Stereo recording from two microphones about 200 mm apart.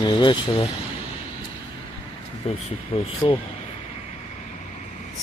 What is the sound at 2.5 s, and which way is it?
Speech, 30° left (ahead or behind).